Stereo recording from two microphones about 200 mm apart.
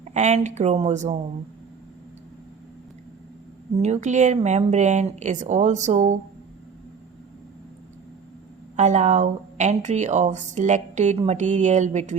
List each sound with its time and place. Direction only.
0.0 s speech: 35° right (ahead or behind)
3.8 s speech: 35° right (ahead or behind)
8.7 s speech: 35° right (ahead or behind)